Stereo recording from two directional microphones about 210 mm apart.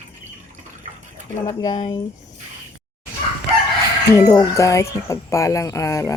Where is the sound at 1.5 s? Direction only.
20° left (ahead or behind).